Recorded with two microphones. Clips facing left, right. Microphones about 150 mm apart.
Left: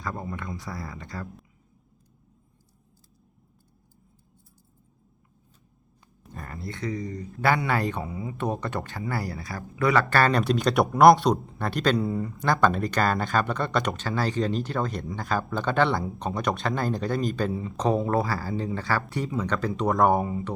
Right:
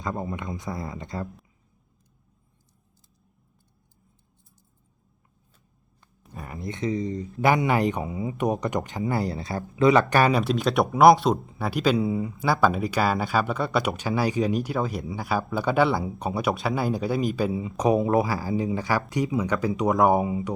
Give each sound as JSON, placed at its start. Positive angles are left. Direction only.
{"t": 0.0, "sound": "speech", "side_deg": -20}
{"t": 6.3, "sound": "speech", "side_deg": -10}